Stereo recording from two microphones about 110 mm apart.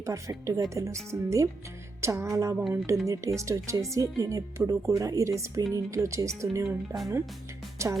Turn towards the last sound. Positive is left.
turn(degrees=-25)  # may be behind; listen again after turning